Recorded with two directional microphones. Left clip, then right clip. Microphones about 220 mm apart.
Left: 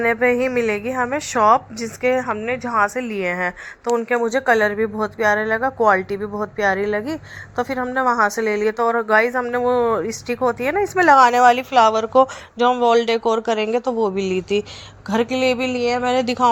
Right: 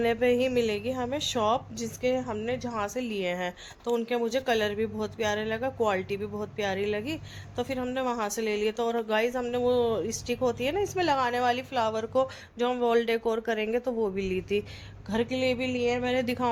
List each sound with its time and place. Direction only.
0.0 s speech: 5° right (ahead or behind)
0.3 s speech: 35° left (ahead or behind)
0.9 s speech: 5° left (ahead or behind)
11.1 s speech: 35° left (ahead or behind); by 16.5 s 10° left (ahead or behind)